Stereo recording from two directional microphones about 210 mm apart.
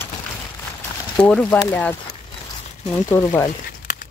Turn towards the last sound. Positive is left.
turn(degrees=35)  # may be behind; listen again after turning